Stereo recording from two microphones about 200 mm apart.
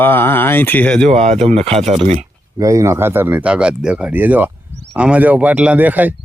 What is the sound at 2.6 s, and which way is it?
Speech, 15° right (ahead or behind).